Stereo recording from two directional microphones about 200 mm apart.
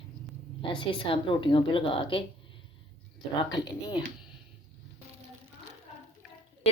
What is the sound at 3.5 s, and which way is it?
Speech, 20° left (ahead or behind).